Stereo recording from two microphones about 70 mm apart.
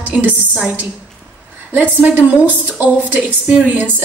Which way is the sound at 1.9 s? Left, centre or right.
Right.